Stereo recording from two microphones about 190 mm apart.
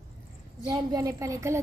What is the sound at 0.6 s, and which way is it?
Speech, 20° right (ahead or behind).